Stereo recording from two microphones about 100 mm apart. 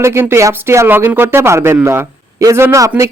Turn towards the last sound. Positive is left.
turn(degrees=-30)  # may be behind; listen again after turning